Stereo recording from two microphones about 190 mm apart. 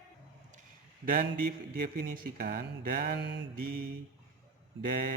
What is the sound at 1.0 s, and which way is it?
A man's voice, 45° right (ahead or behind).